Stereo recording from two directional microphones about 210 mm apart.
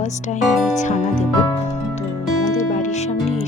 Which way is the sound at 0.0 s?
35° left (ahead or behind).